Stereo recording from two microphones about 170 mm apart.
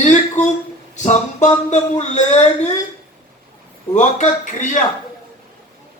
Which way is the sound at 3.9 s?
45° left (ahead or behind).